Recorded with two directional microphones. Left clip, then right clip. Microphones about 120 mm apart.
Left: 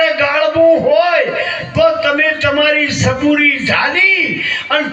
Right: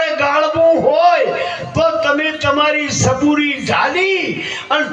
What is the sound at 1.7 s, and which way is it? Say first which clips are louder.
A man's voice: left 2 dB; 25° right (ahead or behind).